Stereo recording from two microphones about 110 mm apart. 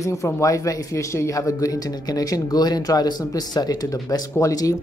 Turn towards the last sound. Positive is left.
turn(degrees=30)  # may be behind; listen again after turning